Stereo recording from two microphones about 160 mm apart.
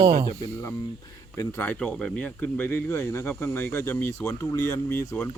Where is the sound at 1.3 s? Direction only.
15° left (ahead or behind).